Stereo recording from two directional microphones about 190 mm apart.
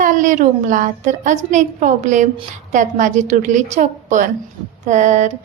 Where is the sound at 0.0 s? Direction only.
40° right (ahead or behind).